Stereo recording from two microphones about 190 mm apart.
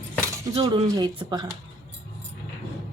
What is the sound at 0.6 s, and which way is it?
Speech, 30° right (ahead or behind).